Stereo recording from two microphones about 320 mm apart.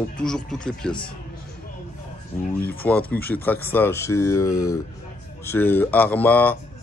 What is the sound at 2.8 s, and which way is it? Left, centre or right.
Speech, centre.